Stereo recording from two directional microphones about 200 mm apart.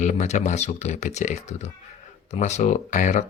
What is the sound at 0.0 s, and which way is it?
Speech, 35° left (ahead or behind).